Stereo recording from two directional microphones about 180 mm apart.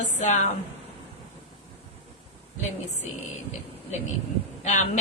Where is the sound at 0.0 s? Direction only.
40° left (ahead or behind).